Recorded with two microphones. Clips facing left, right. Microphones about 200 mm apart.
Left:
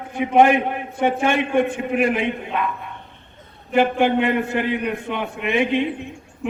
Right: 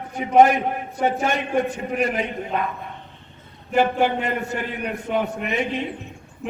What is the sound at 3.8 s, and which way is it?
A man's voice, 40° right (ahead or behind).